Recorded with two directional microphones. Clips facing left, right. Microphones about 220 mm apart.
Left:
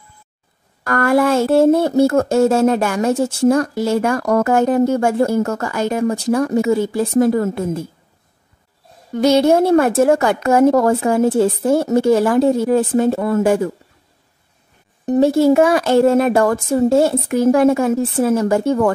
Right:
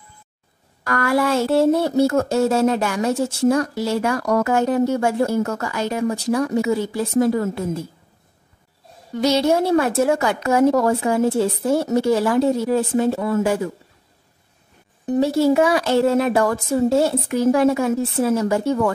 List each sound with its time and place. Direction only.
0.8 s speech: 50° left (ahead or behind)
9.1 s speech: 50° left (ahead or behind)
15.0 s speech: 50° left (ahead or behind)